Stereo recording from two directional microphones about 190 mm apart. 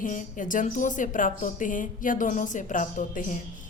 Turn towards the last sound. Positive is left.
turn(degrees=45)  # may be behind; listen again after turning